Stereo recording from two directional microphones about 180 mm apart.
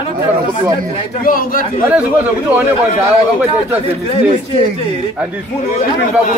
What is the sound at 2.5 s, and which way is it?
Speech, 10° right (ahead or behind).